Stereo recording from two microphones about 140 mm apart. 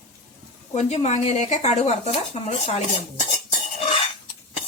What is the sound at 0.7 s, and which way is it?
Speech, 55° left (ahead or behind).